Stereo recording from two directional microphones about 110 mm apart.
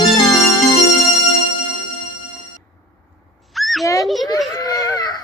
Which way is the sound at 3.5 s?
Centre (ahead or behind).